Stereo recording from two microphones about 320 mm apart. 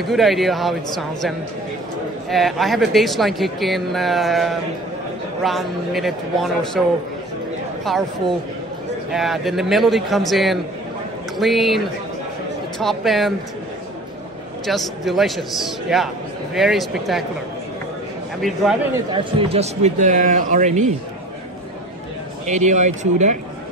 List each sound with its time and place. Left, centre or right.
0.0 s speech: centre
7.8 s speech: centre
14.7 s speech: centre
18.4 s speech: centre
19.1 s speech: centre
22.5 s speech: right